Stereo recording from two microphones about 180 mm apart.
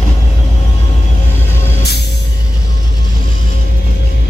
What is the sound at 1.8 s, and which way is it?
Music, 65° left (ahead or behind).